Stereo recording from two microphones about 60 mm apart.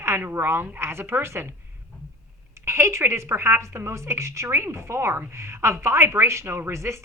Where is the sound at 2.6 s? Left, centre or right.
Right.